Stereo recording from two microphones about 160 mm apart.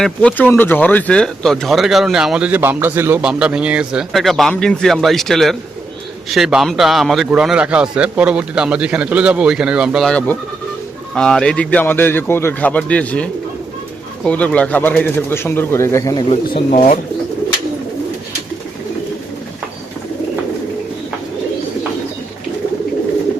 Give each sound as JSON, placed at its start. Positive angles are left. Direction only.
{"t": 0.0, "sound": "speech", "side_deg": 5}
{"t": 16.7, "sound": "speech", "side_deg": 50}